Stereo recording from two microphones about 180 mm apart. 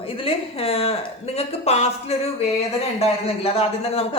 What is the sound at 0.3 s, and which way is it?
Speech, 35° left (ahead or behind).